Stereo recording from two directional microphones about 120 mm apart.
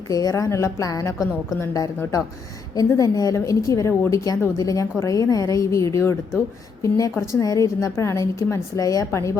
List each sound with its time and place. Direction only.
0.1 s speech: 30° left (ahead or behind)